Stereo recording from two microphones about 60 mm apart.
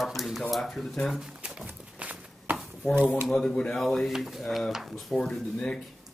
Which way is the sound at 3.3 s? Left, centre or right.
Centre.